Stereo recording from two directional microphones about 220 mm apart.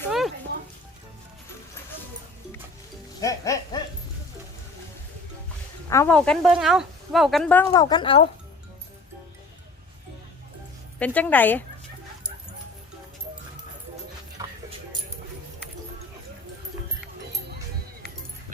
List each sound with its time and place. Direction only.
3.2 s speech: 15° left (ahead or behind)
5.9 s speech: 15° left (ahead or behind)
6.1 s speech: 5° left (ahead or behind)
7.7 s a woman's voice: 20° left (ahead or behind)
11.0 s speech: 5° left (ahead or behind)
14.4 s a sound: 15° right (ahead or behind)